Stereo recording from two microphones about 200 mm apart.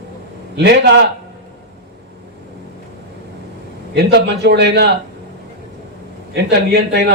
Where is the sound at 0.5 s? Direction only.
60° right (ahead or behind).